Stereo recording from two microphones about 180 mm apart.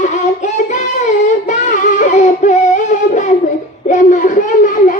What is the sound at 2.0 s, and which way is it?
Music, 45° left (ahead or behind).